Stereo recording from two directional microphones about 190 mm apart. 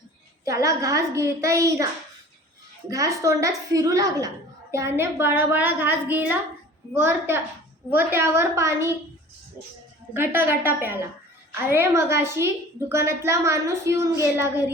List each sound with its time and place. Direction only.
0.4 s a woman's voice: 15° right (ahead or behind)
2.9 s a woman's voice: 15° right (ahead or behind)
10.2 s a woman's voice: 10° right (ahead or behind)